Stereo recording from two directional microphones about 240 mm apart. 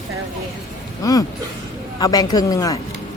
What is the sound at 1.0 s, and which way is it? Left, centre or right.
Speech, centre.